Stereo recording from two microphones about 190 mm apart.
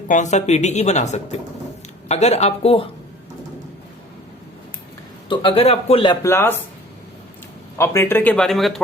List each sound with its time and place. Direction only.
0.1 s speech: 40° left (ahead or behind)
5.3 s speech: 25° left (ahead or behind)
6.2 s speech: 15° left (ahead or behind)
7.8 s speech: 15° left (ahead or behind)